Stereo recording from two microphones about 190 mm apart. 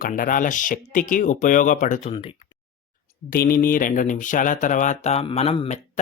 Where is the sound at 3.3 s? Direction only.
50° left (ahead or behind).